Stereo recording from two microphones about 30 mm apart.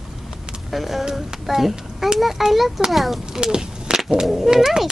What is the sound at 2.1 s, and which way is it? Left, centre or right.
Speech, centre.